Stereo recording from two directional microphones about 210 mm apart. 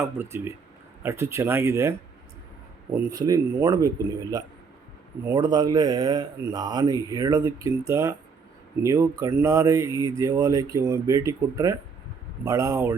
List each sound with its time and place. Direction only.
0.0 s speech: 10° right (ahead or behind)